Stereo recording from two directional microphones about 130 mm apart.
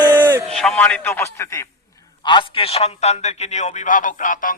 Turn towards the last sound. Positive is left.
turn(degrees=90)